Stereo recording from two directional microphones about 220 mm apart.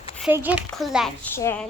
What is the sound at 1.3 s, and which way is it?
Speech, 10° left (ahead or behind).